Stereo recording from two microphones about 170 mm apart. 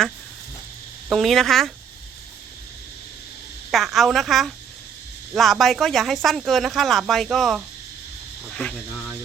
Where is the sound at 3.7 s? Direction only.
Centre (ahead or behind).